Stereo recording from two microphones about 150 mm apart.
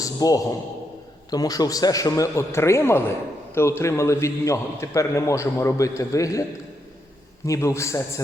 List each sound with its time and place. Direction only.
0.0 s a man's voice: 25° left (ahead or behind)
7.4 s a man's voice: 20° left (ahead or behind)